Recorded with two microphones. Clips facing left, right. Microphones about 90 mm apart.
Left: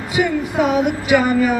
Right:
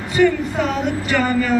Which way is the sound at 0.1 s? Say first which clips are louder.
Right 3 dB; 10° left (ahead or behind).